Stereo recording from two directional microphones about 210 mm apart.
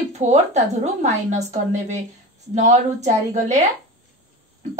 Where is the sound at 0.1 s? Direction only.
30° right (ahead or behind).